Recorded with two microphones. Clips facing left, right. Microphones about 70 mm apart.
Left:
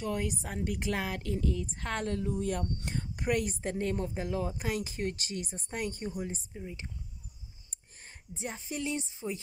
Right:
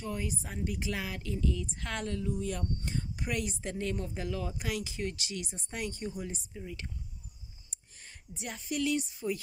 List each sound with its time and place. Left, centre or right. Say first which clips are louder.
0.0 s speech: left 3 dB; left
6.0 s speech: left 1 dB; left
8.4 s speech: right 3 dB; left